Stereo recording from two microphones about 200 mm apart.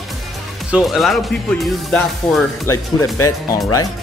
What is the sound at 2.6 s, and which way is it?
Speech, 15° left (ahead or behind).